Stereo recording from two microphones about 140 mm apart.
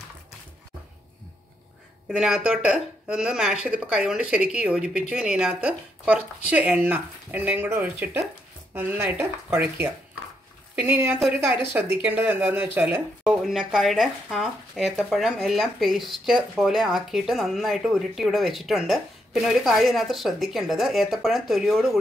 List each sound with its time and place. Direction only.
2.0 s speech: 5° right (ahead or behind)